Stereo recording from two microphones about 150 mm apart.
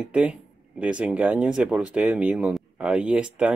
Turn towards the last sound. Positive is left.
turn(degrees=-5)  # may be behind; listen again after turning